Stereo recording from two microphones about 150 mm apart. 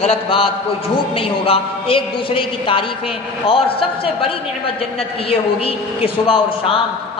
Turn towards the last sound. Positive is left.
turn(degrees=35)  # may be behind; listen again after turning